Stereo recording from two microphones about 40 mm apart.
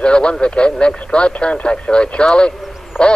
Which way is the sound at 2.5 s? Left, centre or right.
Centre.